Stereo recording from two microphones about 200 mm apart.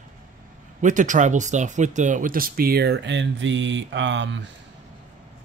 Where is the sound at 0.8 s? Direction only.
40° right (ahead or behind); by 4.4 s 65° right (ahead or behind).